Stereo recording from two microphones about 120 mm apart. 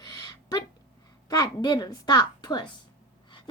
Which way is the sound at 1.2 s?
30° left (ahead or behind).